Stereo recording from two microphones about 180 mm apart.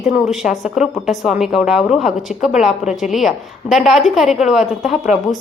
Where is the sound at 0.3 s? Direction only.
Centre (ahead or behind).